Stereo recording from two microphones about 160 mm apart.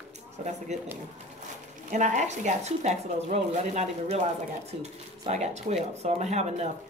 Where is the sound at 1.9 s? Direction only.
50° right (ahead or behind).